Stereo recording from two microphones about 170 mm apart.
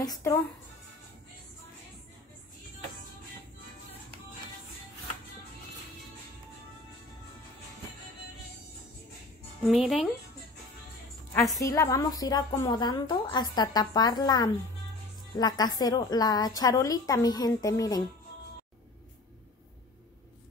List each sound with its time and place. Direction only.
0.0 s a woman's voice: 20° left (ahead or behind)
9.7 s speech: centre (ahead or behind)
11.5 s a woman's voice: 20° left (ahead or behind)